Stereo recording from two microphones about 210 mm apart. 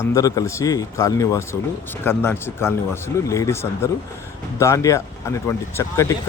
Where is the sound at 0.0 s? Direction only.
15° left (ahead or behind).